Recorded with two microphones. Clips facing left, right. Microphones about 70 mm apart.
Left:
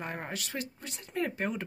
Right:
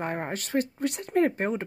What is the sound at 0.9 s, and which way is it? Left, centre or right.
Speech, right.